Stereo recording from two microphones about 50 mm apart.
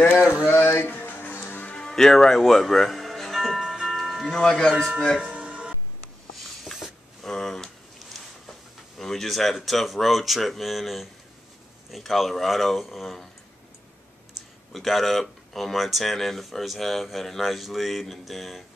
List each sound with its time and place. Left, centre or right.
0.2 s a sound: centre
0.5 s speech: left
0.8 s music: left
1.7 s music: centre
4.3 s speech: centre
5.2 s music: right
6.6 s a sound: centre
8.9 s speech: centre
14.7 s speech: centre